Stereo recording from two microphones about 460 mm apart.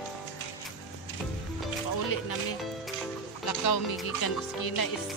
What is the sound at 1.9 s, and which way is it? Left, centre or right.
Music, left.